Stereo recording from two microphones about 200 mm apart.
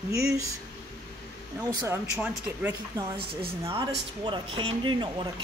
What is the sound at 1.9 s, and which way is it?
Speech, 5° right (ahead or behind).